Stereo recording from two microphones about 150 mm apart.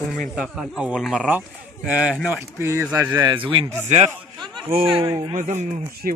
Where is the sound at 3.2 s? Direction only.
35° right (ahead or behind).